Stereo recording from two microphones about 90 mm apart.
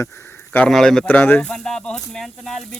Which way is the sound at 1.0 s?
20° left (ahead or behind).